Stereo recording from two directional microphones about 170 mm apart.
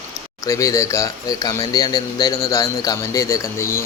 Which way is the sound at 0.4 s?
20° left (ahead or behind).